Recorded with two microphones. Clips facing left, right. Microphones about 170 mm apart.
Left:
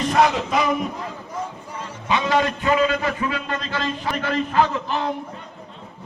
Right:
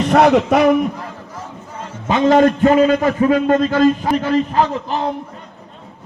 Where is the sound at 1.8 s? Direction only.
45° right (ahead or behind).